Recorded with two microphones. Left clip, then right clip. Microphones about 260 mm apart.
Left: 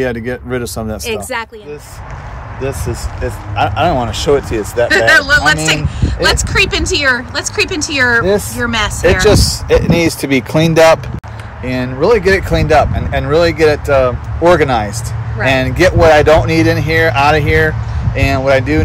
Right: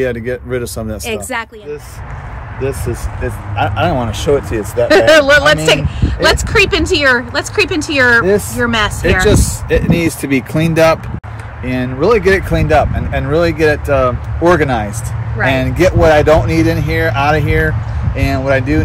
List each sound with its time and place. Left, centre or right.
0.0 s speech: centre
1.0 s a woman's voice: centre
3.5 s speech: centre
4.8 s a woman's voice: centre
9.2 s speech: left
11.6 s speech: centre